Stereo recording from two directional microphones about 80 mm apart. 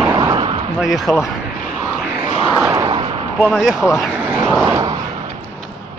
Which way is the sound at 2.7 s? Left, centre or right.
Right.